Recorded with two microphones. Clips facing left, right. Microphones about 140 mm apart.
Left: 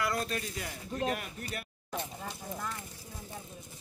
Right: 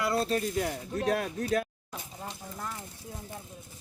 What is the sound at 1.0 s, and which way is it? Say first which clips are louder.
Speech: right 9 dB; 90° right.